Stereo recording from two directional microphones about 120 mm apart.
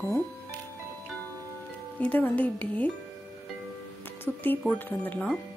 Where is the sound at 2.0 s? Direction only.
15° left (ahead or behind).